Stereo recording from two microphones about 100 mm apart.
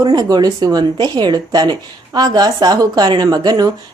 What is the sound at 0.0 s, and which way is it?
Speech, 40° right (ahead or behind).